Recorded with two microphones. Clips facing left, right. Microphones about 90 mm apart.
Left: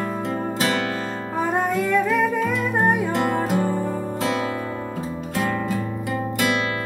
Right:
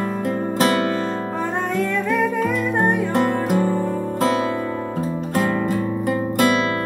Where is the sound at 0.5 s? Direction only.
40° right (ahead or behind).